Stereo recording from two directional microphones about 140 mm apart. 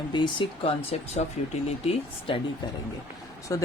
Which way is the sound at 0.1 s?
35° left (ahead or behind).